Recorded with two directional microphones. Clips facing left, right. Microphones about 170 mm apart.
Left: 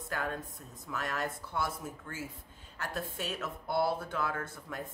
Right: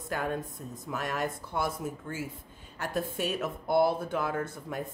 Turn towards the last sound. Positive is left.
turn(degrees=-15)  # may be behind; listen again after turning